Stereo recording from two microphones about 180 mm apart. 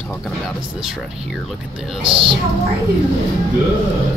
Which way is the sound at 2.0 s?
30° right (ahead or behind).